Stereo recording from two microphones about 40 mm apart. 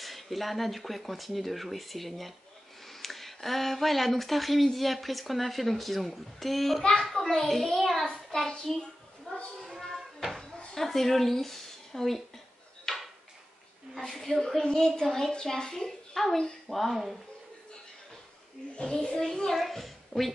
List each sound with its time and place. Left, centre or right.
0.0 s speech: centre
6.8 s a woman's voice: centre
7.1 s a child's voice: centre
9.3 s a sound: left
9.9 s cupboard open or close: centre
10.7 s speech: centre
12.8 s tick-tock: centre
14.1 s speech: centre
14.6 s a woman's voice: centre
18.8 s a child's voice: centre
19.6 s a woman's voice: centre